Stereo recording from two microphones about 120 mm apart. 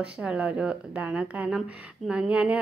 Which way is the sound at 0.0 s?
10° right (ahead or behind).